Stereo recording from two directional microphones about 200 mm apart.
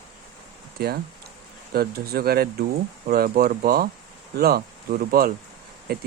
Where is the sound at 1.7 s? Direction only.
50° right (ahead or behind).